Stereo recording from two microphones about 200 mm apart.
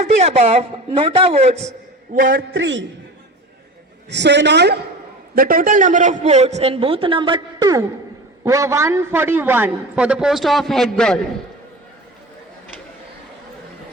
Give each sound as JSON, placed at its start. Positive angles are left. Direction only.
{"t": 0.0, "sound": "a man's voice", "side_deg": -30}
{"t": 2.1, "sound": "a man's voice", "side_deg": -50}
{"t": 4.1, "sound": "a woman's voice", "side_deg": -60}
{"t": 5.3, "sound": "a man's voice", "side_deg": -45}